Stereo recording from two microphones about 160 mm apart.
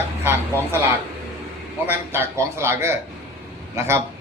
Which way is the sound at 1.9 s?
15° right (ahead or behind).